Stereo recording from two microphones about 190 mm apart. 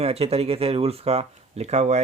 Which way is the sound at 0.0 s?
30° right (ahead or behind).